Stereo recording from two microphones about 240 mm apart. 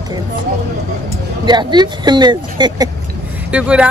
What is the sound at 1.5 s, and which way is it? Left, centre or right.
Speech, centre.